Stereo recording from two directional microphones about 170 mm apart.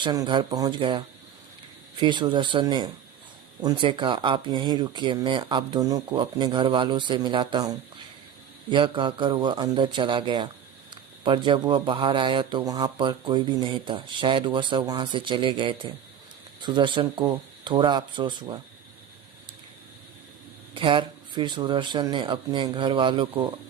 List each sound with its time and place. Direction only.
0.0 s speech: 25° right (ahead or behind)
20.7 s speech: 30° right (ahead or behind)